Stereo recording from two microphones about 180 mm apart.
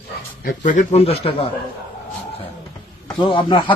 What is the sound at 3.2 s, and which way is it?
Speech, 30° left (ahead or behind).